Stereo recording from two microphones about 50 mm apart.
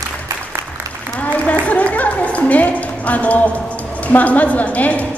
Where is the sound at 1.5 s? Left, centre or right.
Left.